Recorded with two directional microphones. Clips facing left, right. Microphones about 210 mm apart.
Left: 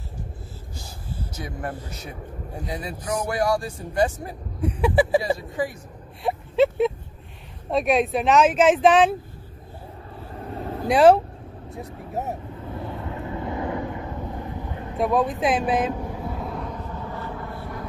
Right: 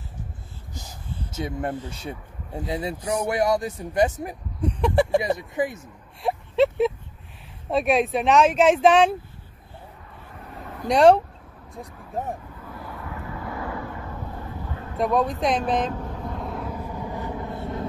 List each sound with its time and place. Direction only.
0.7 s a sound: 20° right (ahead or behind)
2.7 s speech: 25° right (ahead or behind)
4.6 s speech: 5° left (ahead or behind)
5.5 s speech: 20° right (ahead or behind)
6.2 s a sound: centre (ahead or behind)
7.7 s speech: centre (ahead or behind)
10.3 s vehicle: 30° left (ahead or behind)
10.9 s speech: 5° left (ahead or behind)
12.6 s vehicle: 25° left (ahead or behind)
15.0 s vehicle: centre (ahead or behind); by 17.8 s 25° right (ahead or behind)